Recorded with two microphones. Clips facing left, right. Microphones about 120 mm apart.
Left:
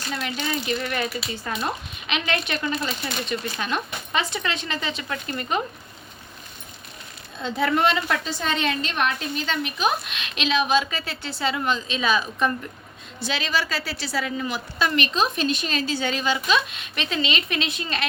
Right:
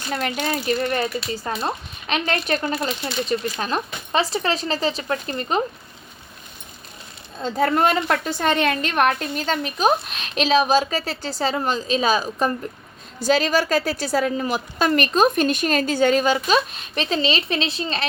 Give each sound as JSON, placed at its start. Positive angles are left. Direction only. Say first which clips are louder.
{"t": 0.1, "sound": "a woman's voice", "louder": "right 4 dB", "side_deg": -50}
{"t": 7.4, "sound": "a woman's voice", "louder": "right 3 dB", "side_deg": -40}